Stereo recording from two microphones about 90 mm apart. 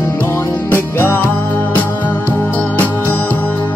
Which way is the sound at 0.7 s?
25° left (ahead or behind).